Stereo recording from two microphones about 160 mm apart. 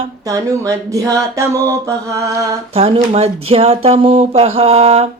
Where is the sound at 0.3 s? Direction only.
20° right (ahead or behind).